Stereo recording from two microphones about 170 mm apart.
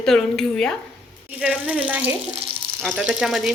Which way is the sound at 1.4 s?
10° right (ahead or behind).